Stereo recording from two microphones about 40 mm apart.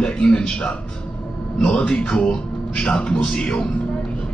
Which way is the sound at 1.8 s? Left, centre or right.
Left.